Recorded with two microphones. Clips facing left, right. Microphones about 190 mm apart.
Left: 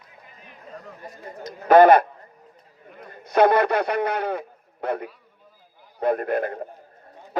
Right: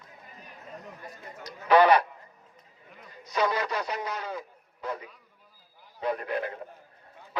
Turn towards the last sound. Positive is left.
turn(degrees=50)  # may be behind; listen again after turning